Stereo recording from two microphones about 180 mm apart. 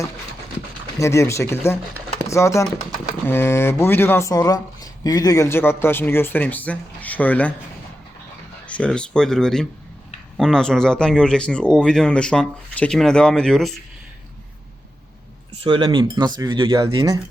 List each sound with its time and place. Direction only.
0.9 s speech: 15° left (ahead or behind)
8.6 s speech: 5° left (ahead or behind)
15.6 s speech: 30° right (ahead or behind)